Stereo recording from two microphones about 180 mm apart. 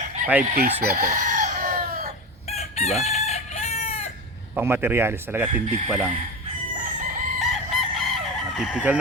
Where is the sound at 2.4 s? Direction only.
35° left (ahead or behind).